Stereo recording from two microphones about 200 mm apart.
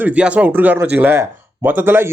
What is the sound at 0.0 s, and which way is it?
A man's voice, 5° right (ahead or behind).